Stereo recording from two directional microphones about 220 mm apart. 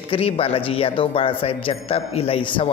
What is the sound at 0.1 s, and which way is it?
A man's voice, 25° left (ahead or behind).